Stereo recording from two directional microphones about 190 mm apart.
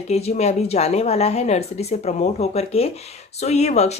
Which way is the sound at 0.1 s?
35° left (ahead or behind).